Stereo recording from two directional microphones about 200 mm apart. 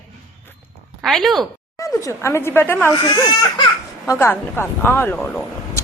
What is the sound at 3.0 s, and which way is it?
Speech, 25° left (ahead or behind).